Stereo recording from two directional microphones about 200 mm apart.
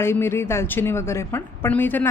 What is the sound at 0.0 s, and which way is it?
A woman's voice, 10° left (ahead or behind).